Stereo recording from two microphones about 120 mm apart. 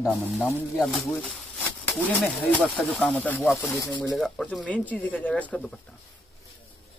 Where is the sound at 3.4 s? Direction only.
Centre (ahead or behind).